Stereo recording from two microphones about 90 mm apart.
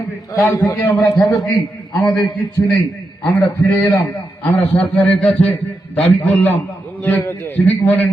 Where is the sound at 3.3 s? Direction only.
25° left (ahead or behind).